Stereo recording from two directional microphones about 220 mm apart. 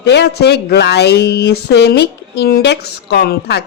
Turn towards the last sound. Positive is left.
turn(degrees=45)  # may be behind; listen again after turning